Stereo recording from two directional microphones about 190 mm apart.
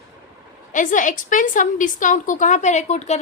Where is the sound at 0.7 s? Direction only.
40° left (ahead or behind).